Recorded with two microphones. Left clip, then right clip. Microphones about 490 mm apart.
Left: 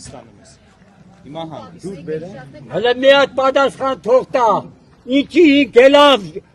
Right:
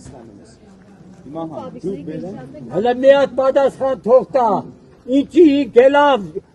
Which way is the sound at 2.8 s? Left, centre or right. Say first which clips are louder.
Left 1 dB; left.